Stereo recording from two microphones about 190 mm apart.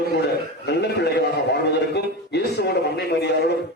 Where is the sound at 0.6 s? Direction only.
60° left (ahead or behind).